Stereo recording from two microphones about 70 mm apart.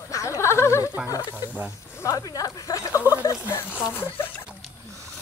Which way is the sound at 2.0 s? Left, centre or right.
Left.